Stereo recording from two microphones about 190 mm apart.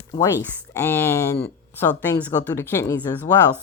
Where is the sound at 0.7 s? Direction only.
15° left (ahead or behind).